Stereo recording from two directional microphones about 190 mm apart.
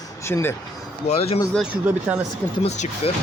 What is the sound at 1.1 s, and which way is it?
Speech, 35° left (ahead or behind).